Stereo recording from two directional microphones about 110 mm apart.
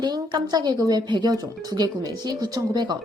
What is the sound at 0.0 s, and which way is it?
Speech, 40° right (ahead or behind).